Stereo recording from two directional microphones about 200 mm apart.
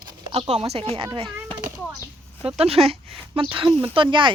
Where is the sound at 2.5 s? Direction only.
30° right (ahead or behind).